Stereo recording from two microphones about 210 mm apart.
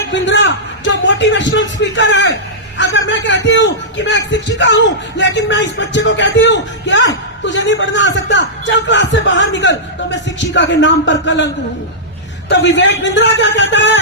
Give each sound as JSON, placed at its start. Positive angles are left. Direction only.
{"t": 0.1, "sound": "a man's voice", "side_deg": 60}
{"t": 12.5, "sound": "a man's voice", "side_deg": 60}